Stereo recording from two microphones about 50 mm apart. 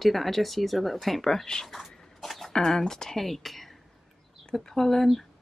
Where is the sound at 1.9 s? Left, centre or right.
Centre.